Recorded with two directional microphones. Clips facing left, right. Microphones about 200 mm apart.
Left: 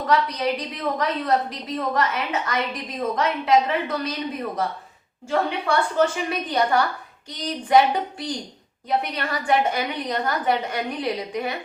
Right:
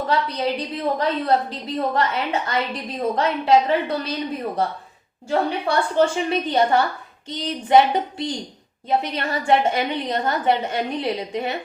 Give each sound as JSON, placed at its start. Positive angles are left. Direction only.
{"t": 0.1, "sound": "a woman's voice", "side_deg": -30}
{"t": 8.9, "sound": "a woman's voice", "side_deg": -25}